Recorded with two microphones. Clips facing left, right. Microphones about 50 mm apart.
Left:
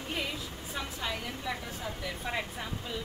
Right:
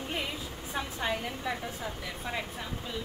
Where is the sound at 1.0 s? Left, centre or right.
Right.